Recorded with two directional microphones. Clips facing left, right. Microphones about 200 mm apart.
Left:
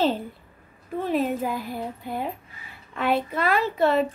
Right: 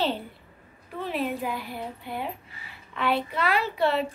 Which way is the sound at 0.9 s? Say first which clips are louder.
Left 5 dB; 45° left (ahead or behind).